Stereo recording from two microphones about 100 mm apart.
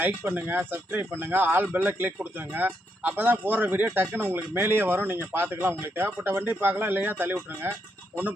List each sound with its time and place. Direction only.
0.0 s speech: 20° right (ahead or behind)